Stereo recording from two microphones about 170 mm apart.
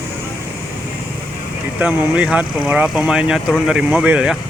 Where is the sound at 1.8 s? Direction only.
10° right (ahead or behind).